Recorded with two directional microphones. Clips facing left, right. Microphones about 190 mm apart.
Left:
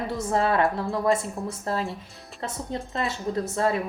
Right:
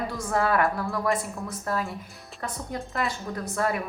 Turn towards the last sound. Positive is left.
turn(degrees=25)  # may be behind; listen again after turning